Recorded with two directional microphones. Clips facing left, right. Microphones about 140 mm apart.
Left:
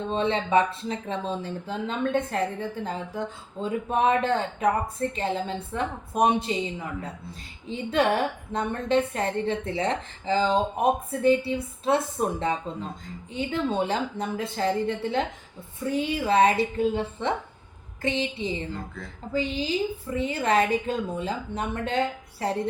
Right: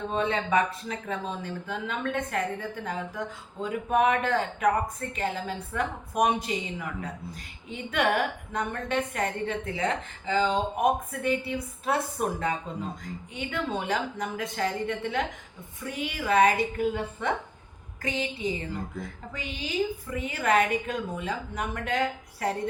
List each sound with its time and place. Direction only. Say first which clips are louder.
0.1 s speech: left 3 dB; 25° left (ahead or behind)